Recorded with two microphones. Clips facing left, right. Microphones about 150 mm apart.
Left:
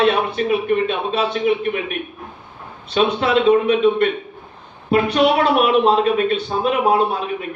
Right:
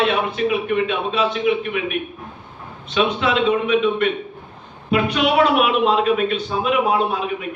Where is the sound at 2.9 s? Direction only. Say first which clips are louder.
Left 2 dB; 35° left (ahead or behind).